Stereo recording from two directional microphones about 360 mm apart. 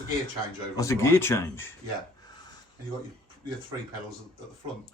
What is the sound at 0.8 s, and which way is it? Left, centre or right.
Speech, centre.